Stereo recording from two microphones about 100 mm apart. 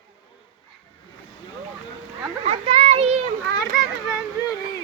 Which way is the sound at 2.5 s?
75° right (ahead or behind).